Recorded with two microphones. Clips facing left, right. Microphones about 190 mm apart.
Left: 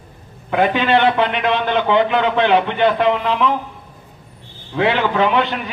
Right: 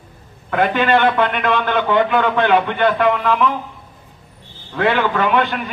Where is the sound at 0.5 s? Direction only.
50° right (ahead or behind).